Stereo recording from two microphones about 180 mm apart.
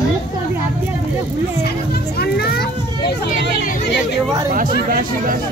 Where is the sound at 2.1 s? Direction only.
60° left (ahead or behind).